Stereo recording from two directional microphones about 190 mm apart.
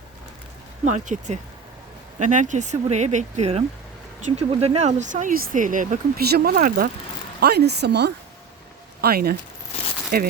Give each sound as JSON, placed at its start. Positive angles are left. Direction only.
{"t": 0.9, "sound": "speech", "side_deg": -40}